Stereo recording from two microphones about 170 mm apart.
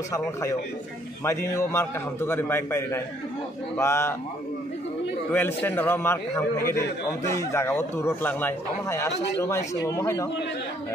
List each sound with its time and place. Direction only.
1.5 s speech: 15° left (ahead or behind)
5.3 s speech: 10° left (ahead or behind)
9.1 s speech: 90° left
9.4 s speech: 15° left (ahead or behind)